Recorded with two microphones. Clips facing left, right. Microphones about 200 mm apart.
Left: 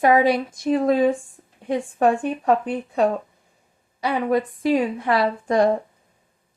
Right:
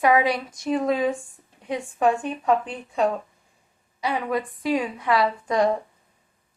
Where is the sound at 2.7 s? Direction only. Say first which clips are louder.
Left 4 dB; 60° left (ahead or behind).